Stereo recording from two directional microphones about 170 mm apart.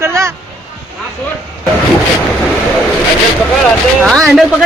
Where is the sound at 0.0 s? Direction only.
15° right (ahead or behind).